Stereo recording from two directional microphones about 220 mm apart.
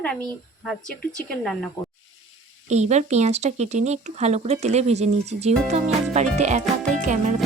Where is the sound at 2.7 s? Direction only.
30° right (ahead or behind).